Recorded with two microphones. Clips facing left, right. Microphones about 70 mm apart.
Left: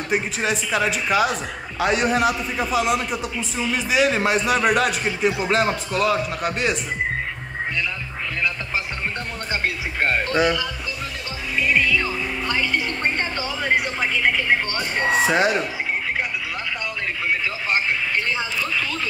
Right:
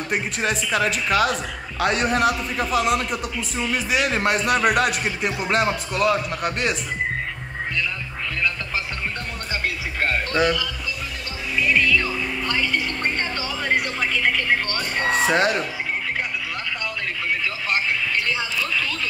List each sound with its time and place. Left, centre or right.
0.1 s speech: centre
9.5 s speech: left
11.7 s music: centre
13.7 s music: centre
15.2 s speech: centre